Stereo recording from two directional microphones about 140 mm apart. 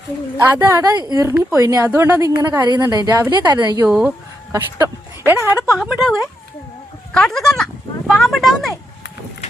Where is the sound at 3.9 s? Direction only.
5° right (ahead or behind).